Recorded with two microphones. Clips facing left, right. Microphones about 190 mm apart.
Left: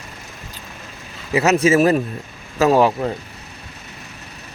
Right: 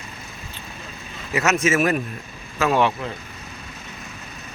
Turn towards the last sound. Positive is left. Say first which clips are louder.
# left 5 dB
turn(degrees=35)  # may be behind; listen again after turning